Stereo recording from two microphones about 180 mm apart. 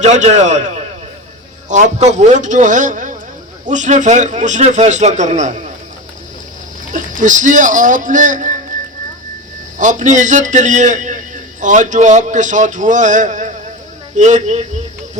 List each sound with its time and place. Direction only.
0.0 s a man's voice: 40° right (ahead or behind)
1.7 s a man's voice: 40° right (ahead or behind)
6.8 s a man's voice: 45° right (ahead or behind)
9.7 s a man's voice: 45° right (ahead or behind)